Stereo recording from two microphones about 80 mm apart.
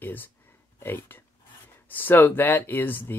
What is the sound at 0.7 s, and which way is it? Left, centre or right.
Speech, left.